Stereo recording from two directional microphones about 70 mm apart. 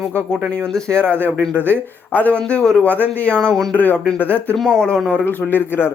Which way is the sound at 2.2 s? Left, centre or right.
Centre.